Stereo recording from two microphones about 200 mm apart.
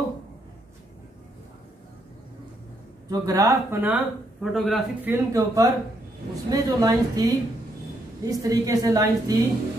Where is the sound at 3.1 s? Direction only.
15° right (ahead or behind).